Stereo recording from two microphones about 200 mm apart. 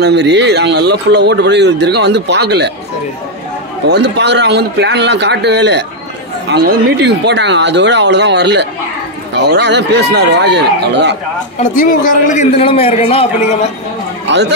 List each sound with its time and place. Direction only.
0.0 s speech: 60° right (ahead or behind)
3.9 s speech: 60° right (ahead or behind)
11.7 s a man's voice: 40° left (ahead or behind)
14.2 s chatter: 60° right (ahead or behind)